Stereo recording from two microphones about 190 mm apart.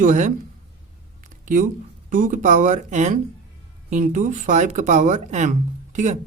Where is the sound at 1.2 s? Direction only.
45° right (ahead or behind).